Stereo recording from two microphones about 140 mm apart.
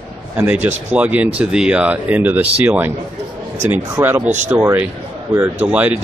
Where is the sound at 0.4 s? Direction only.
10° right (ahead or behind).